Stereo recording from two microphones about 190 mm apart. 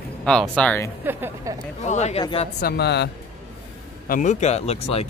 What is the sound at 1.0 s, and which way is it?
Speech, 15° right (ahead or behind).